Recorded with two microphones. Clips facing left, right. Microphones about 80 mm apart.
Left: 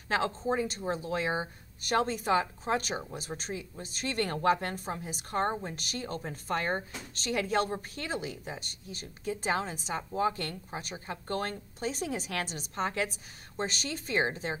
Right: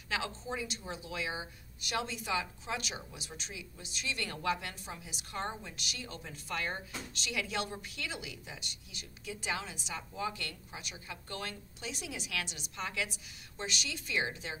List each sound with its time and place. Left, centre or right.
0.1 s a woman's voice: left